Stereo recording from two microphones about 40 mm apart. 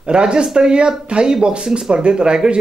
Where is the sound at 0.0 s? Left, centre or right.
Right.